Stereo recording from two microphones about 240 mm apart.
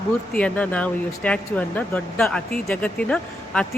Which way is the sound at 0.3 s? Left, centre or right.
Centre.